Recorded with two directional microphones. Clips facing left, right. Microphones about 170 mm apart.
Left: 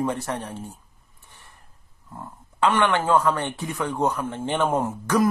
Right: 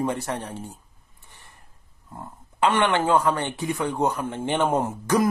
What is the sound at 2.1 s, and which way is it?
A man's voice, 20° right (ahead or behind).